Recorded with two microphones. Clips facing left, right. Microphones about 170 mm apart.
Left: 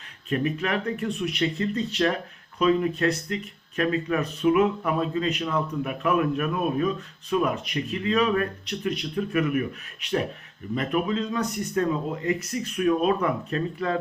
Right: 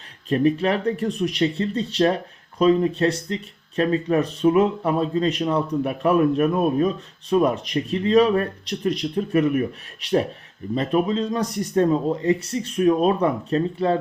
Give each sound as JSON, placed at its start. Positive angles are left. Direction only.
{"t": 0.3, "sound": "speech", "side_deg": -30}